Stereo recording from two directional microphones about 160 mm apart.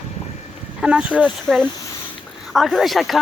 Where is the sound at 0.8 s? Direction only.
5° right (ahead or behind).